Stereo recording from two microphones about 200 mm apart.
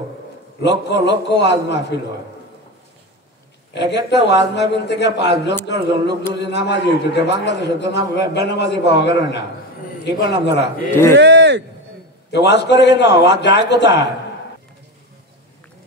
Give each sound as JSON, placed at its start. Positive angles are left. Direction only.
{"t": 0.6, "sound": "a man's voice", "side_deg": 60}
{"t": 3.7, "sound": "a man's voice", "side_deg": 60}
{"t": 10.9, "sound": "speech", "side_deg": 10}
{"t": 11.1, "sound": "a sound", "side_deg": -60}
{"t": 12.3, "sound": "a man's voice", "side_deg": 60}